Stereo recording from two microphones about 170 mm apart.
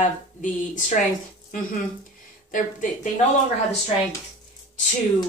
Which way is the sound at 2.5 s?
50° left (ahead or behind).